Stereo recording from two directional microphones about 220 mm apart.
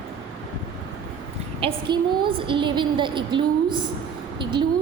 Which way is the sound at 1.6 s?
20° right (ahead or behind).